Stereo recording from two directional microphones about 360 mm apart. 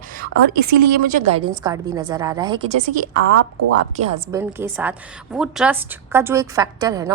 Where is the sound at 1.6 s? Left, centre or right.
Centre.